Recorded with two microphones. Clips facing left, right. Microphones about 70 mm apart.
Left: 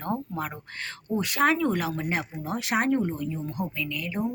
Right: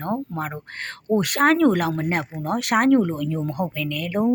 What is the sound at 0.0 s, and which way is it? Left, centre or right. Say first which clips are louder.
Speech: right 4 dB; right.